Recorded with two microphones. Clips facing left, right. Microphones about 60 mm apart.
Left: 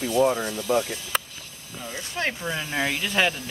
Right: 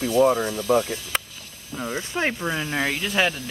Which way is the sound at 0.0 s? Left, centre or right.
Centre.